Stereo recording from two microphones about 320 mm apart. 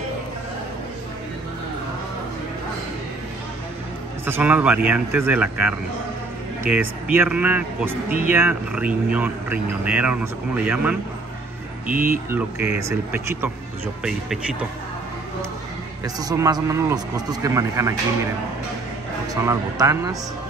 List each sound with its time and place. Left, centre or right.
4.3 s speech: centre
12.3 s a man's voice: centre
16.0 s a man's voice: centre
19.4 s a man's voice: centre